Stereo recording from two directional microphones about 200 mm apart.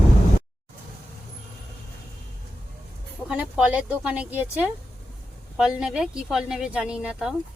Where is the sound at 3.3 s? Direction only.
5° right (ahead or behind).